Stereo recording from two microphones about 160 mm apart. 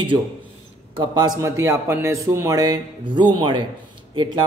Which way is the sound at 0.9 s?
25° right (ahead or behind).